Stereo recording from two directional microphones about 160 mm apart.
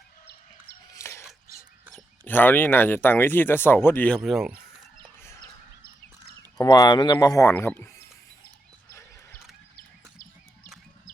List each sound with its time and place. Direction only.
0.9 s chicken: 15° left (ahead or behind)
2.2 s speech: 10° left (ahead or behind); by 4.6 s 5° right (ahead or behind)
5.2 s fowl: 15° left (ahead or behind)
6.6 s speech: 25° left (ahead or behind)
8.9 s a sound: 15° left (ahead or behind)
9.7 s a sound: 60° left (ahead or behind)